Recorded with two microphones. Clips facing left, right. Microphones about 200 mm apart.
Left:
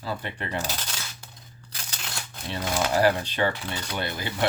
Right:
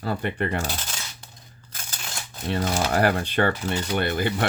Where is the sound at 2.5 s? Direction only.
55° right (ahead or behind).